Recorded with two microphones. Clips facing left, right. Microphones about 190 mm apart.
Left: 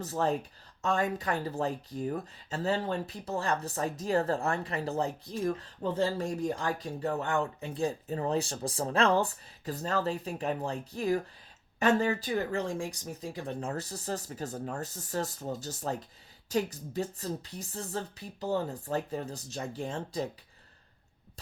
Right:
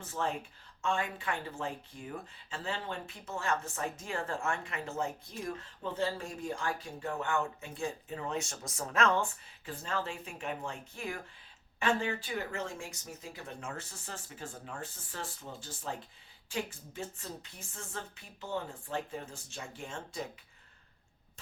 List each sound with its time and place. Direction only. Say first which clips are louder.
0.0 s speech: left 6 dB; 40° left (ahead or behind)